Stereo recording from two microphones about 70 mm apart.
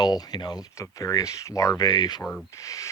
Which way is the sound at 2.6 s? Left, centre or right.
Left.